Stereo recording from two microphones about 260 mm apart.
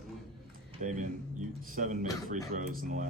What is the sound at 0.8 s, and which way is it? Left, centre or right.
Speech, right.